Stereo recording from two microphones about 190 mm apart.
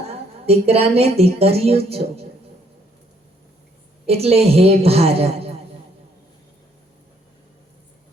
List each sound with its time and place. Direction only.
0.4 s a woman's voice: 30° right (ahead or behind)
4.0 s a woman's voice: 30° right (ahead or behind)